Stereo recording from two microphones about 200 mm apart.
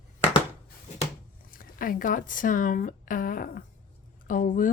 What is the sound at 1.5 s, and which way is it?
Speech, 45° left (ahead or behind).